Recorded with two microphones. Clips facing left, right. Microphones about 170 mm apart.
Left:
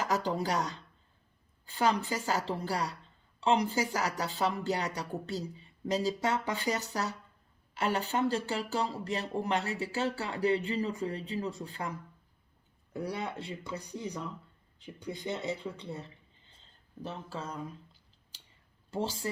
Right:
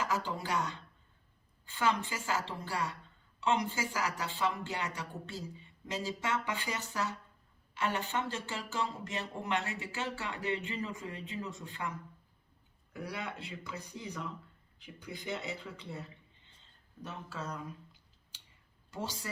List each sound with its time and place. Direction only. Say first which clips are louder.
0.0 s speech: left 4 dB; 40° left (ahead or behind)
18.9 s speech: left 7 dB; 30° left (ahead or behind)